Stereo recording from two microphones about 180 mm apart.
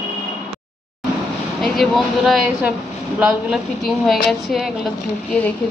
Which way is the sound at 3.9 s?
Centre (ahead or behind).